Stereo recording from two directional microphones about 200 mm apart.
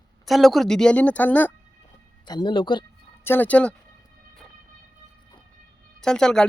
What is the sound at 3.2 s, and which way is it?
Speech, 10° left (ahead or behind).